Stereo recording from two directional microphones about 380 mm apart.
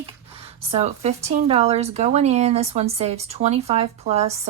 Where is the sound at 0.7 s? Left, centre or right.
Centre.